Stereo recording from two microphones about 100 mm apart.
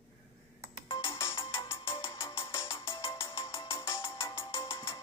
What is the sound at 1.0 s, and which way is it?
Ringtone, 25° left (ahead or behind).